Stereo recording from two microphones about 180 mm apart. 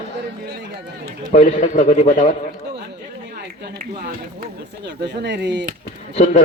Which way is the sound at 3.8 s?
55° right (ahead or behind).